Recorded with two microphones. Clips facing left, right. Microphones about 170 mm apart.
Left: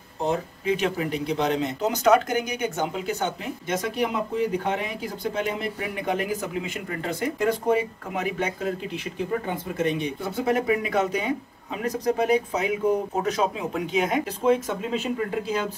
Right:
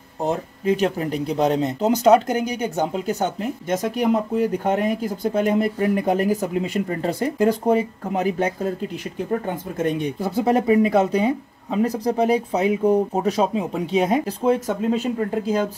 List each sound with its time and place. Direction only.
0.7 s speech: 40° right (ahead or behind)
9.8 s speech: 40° right (ahead or behind)